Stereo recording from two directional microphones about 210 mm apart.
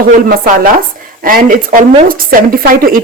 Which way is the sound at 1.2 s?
40° right (ahead or behind).